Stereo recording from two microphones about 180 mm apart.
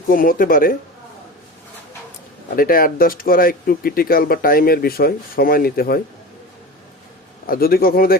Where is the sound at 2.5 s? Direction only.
55° left (ahead or behind).